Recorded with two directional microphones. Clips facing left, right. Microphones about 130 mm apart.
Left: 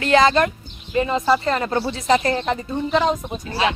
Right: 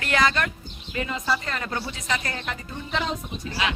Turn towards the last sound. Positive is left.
turn(degrees=35)  # may be behind; listen again after turning